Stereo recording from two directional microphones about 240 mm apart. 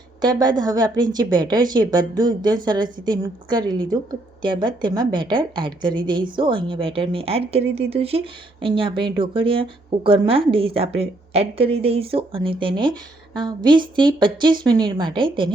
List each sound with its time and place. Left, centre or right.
0.2 s speech: centre